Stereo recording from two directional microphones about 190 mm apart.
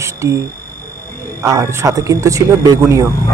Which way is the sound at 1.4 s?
15° right (ahead or behind).